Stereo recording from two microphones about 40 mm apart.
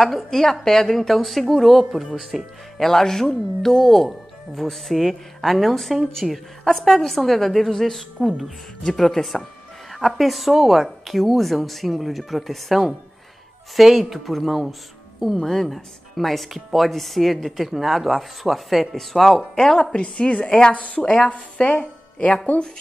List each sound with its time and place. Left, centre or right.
0.0 s speech: centre
2.8 s speech: centre
20.0 s a woman's voice: left